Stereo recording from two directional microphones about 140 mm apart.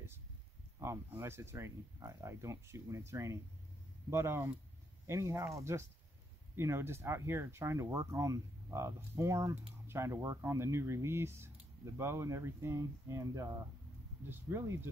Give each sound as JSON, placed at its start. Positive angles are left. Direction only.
{"t": 0.7, "sound": "speech", "side_deg": -20}